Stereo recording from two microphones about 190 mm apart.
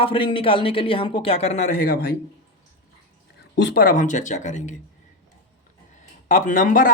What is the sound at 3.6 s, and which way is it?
A man's voice, 50° left (ahead or behind).